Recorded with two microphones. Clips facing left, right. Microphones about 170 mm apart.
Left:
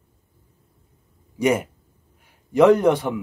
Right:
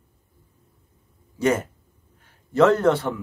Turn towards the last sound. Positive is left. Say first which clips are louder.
# left 3 dB
turn(degrees=15)  # may be behind; listen again after turning